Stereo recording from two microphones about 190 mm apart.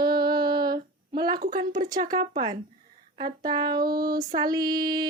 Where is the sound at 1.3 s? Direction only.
50° right (ahead or behind).